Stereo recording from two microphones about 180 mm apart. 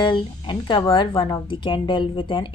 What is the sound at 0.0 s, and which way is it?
Speech, 25° left (ahead or behind).